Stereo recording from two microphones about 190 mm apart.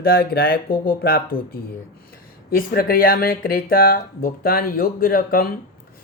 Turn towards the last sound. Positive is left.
turn(degrees=50)  # may be behind; listen again after turning